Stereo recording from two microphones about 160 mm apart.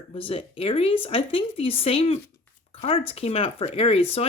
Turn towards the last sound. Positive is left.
turn(degrees=40)  # may be behind; listen again after turning